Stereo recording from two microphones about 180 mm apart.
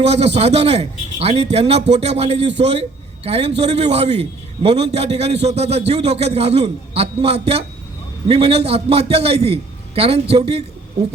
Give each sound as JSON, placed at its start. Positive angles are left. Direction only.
{"t": 0.0, "sound": "a man's voice", "side_deg": -35}